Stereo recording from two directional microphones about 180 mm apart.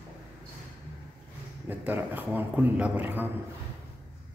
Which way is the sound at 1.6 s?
10° right (ahead or behind).